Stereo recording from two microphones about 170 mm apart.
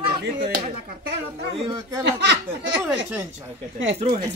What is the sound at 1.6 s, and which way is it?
Speech, 25° right (ahead or behind).